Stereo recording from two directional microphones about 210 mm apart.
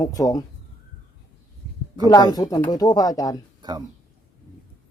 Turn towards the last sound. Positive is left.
turn(degrees=15)  # may be behind; listen again after turning